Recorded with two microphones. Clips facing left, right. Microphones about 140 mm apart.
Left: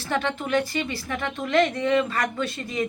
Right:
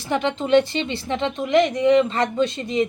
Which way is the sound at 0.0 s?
15° right (ahead or behind).